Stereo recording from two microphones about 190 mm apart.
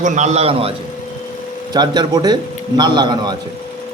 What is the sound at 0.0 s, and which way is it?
Speech, 40° right (ahead or behind).